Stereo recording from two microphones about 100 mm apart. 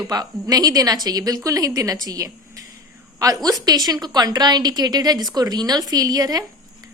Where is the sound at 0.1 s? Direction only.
40° right (ahead or behind).